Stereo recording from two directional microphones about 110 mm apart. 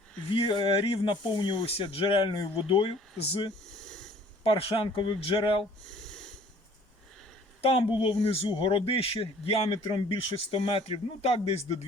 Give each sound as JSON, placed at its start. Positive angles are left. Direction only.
{"t": 0.3, "sound": "speech", "side_deg": 50}
{"t": 1.6, "sound": "speech", "side_deg": 60}
{"t": 3.7, "sound": "a sound", "side_deg": 5}
{"t": 4.4, "sound": "speech", "side_deg": 60}
{"t": 5.8, "sound": "snort", "side_deg": 5}
{"t": 7.6, "sound": "speech", "side_deg": 55}